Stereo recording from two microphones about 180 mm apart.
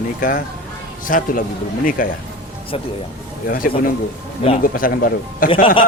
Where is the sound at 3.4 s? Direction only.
50° left (ahead or behind).